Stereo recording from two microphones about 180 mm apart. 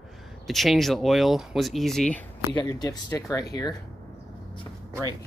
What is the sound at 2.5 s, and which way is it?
Speech, 20° left (ahead or behind).